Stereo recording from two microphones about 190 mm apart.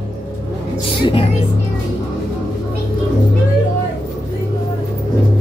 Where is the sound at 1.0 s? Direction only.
30° left (ahead or behind).